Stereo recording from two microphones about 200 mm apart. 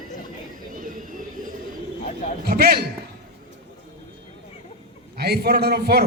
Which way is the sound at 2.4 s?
50° right (ahead or behind).